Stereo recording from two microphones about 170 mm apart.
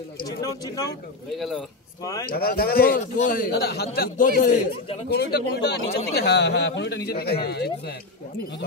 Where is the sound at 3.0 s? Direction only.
50° left (ahead or behind).